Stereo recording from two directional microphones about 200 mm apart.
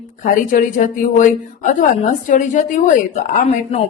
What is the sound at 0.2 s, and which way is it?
A woman's voice, 40° left (ahead or behind).